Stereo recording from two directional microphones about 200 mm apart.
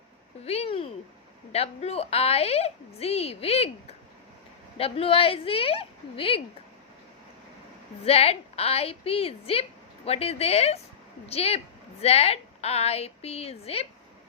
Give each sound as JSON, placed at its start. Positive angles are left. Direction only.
{"t": 0.4, "sound": "a woman's voice", "side_deg": 30}
{"t": 8.0, "sound": "a woman's voice", "side_deg": 30}